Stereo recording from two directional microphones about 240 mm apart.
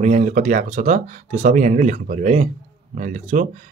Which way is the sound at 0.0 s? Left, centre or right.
Right.